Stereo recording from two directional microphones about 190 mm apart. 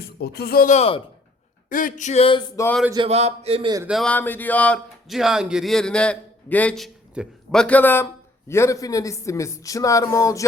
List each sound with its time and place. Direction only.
0.0 s speech: 55° left (ahead or behind); by 1.0 s 30° left (ahead or behind)
1.7 s a sound: 40° left (ahead or behind); by 2.5 s 25° left (ahead or behind)
2.9 s speech: 30° right (ahead or behind)
3.8 s speech: centre (ahead or behind); by 10.4 s 15° left (ahead or behind)